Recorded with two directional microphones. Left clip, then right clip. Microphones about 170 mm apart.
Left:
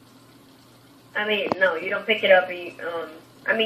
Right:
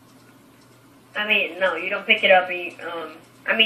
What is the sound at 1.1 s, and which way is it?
A woman's voice, 30° left (ahead or behind).